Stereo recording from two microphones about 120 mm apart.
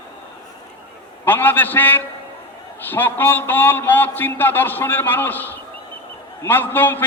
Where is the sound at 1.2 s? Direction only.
15° left (ahead or behind).